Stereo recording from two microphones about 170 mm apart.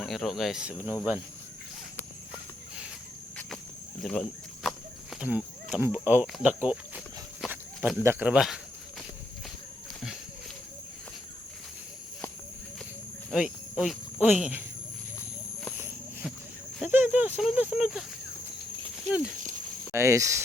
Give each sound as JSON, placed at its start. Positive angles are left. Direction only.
{"t": 0.0, "sound": "speech", "side_deg": 0}
{"t": 4.0, "sound": "speech", "side_deg": 5}
{"t": 5.2, "sound": "a sound", "side_deg": -5}
{"t": 5.8, "sound": "speech", "side_deg": -10}
{"t": 13.3, "sound": "speech", "side_deg": -5}
{"t": 16.8, "sound": "speech", "side_deg": -10}
{"t": 19.9, "sound": "speech", "side_deg": -15}